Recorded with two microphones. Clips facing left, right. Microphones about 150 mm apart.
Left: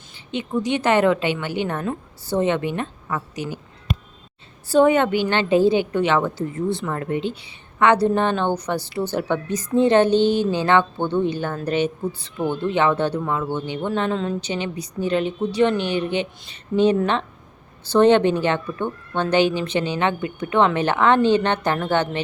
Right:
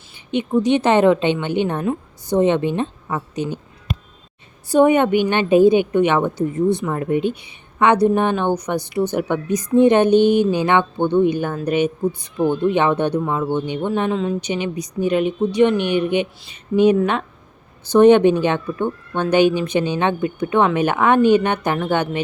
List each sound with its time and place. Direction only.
0.3 s a woman's voice: 20° right (ahead or behind)
4.7 s a woman's voice: 15° right (ahead or behind)